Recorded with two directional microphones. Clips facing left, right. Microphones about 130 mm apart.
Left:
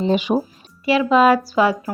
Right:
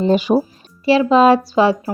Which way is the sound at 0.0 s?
40° right (ahead or behind).